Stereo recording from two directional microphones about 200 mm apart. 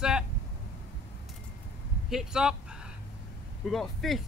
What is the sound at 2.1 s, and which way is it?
Speech, 5° right (ahead or behind).